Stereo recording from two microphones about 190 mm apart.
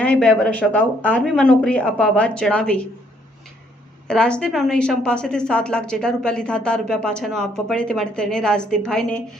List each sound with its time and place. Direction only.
0.0 s a woman's voice: 5° left (ahead or behind)
4.1 s a woman's voice: 5° left (ahead or behind)